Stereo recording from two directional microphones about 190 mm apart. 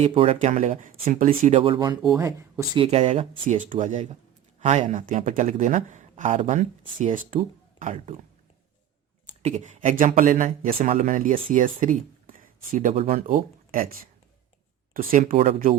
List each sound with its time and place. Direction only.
0.0 s speech: 30° right (ahead or behind)
2.8 s speech: 35° right (ahead or behind)
9.4 s speech: 35° right (ahead or behind)
14.9 s speech: 50° right (ahead or behind)